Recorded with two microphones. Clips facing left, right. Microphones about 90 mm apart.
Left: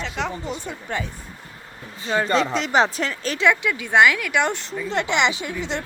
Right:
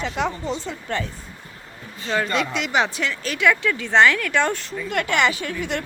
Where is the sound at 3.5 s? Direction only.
10° left (ahead or behind).